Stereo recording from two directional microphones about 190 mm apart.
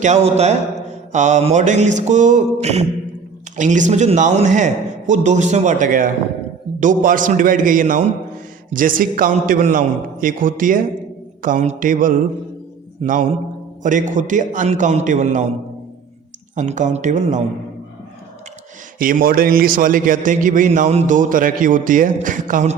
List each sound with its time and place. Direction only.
0.0 s a man's voice: 35° right (ahead or behind)
16.6 s speech: 40° right (ahead or behind)
18.9 s a man's voice: 45° right (ahead or behind)